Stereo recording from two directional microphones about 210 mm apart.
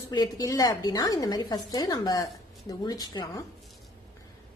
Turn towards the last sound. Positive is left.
turn(degrees=20)  # may be behind; listen again after turning